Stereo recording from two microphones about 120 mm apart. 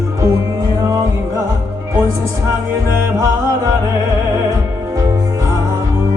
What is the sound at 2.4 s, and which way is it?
Music, 25° right (ahead or behind).